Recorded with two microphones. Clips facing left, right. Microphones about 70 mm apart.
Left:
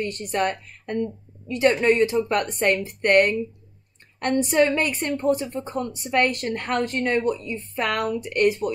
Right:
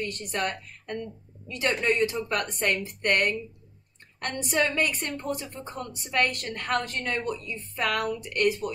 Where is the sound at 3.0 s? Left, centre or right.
Left.